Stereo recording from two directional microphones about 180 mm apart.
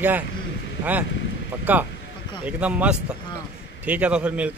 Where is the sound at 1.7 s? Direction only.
10° right (ahead or behind).